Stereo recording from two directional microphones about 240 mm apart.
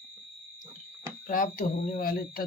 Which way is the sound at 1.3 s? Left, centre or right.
Left.